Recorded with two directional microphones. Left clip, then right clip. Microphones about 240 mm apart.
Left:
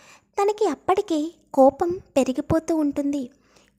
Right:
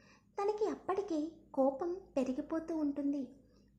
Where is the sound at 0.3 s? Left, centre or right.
Left.